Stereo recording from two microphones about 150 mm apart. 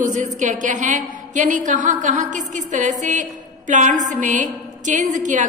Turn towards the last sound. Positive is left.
turn(degrees=-55)  # may be behind; listen again after turning